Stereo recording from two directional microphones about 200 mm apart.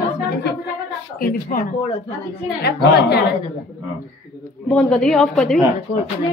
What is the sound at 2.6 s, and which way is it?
Speech, 50° left (ahead or behind).